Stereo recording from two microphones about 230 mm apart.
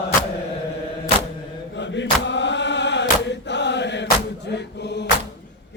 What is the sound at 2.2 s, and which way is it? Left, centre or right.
Chant, left.